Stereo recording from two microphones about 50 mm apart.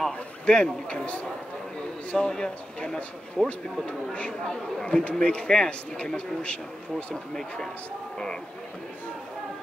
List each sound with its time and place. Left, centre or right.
0.5 s a man's voice: centre
3.4 s speech: centre
3.8 s a man's voice: left
7.3 s speech: centre